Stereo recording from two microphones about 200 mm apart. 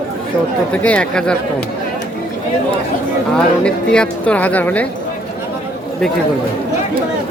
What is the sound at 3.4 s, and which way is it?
Speech, 5° left (ahead or behind).